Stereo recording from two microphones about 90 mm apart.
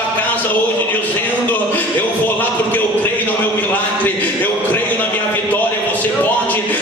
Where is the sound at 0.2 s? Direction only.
20° left (ahead or behind).